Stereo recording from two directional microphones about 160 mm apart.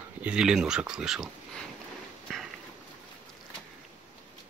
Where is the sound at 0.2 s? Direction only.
5° right (ahead or behind).